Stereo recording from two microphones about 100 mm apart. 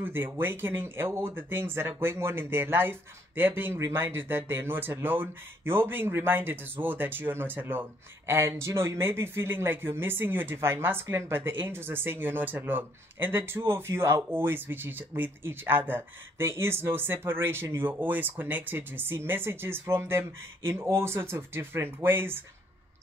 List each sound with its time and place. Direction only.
0.0 s speech: 20° right (ahead or behind)